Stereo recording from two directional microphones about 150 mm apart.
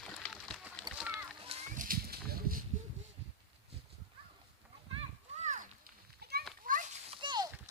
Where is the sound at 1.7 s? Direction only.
65° right (ahead or behind).